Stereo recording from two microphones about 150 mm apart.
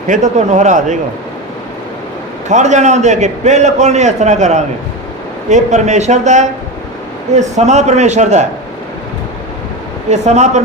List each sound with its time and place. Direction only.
0.1 s a man's voice: 55° right (ahead or behind)
2.5 s a man's voice: 50° right (ahead or behind)
10.1 s a man's voice: 50° right (ahead or behind)